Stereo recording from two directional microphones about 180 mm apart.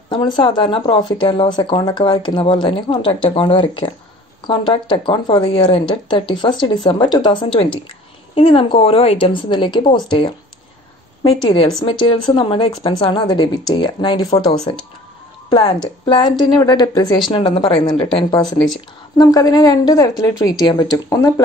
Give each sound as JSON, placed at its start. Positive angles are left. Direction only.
{"t": 0.1, "sound": "speech", "side_deg": 25}
{"t": 8.4, "sound": "speech", "side_deg": 30}
{"t": 11.4, "sound": "speech", "side_deg": 25}